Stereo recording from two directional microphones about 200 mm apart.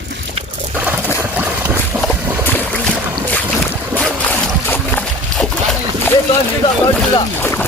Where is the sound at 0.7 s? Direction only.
10° right (ahead or behind).